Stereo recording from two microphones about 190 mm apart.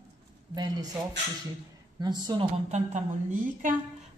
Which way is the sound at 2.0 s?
20° right (ahead or behind).